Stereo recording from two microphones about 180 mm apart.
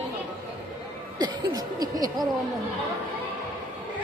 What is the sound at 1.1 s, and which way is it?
Speech, 20° right (ahead or behind).